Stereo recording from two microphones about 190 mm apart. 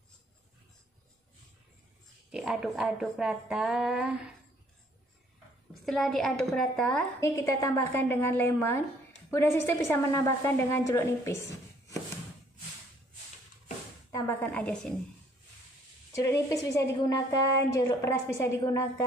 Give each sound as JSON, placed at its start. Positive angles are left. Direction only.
{"t": 2.3, "sound": "a woman's voice", "side_deg": -5}
{"t": 5.9, "sound": "a woman's voice", "side_deg": 0}
{"t": 7.2, "sound": "a woman's voice", "side_deg": 15}
{"t": 14.1, "sound": "a woman's voice", "side_deg": 10}
{"t": 16.2, "sound": "a woman's voice", "side_deg": 15}